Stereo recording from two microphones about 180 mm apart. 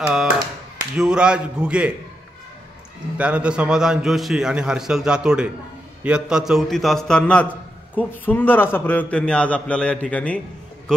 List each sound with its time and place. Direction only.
0.0 s a man's voice: 5° right (ahead or behind)
3.2 s a man's voice: 5° right (ahead or behind)